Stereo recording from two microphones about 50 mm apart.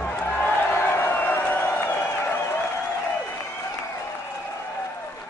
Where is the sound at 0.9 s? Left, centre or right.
Left.